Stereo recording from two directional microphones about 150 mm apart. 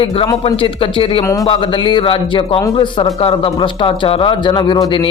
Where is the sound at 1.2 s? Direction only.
25° left (ahead or behind).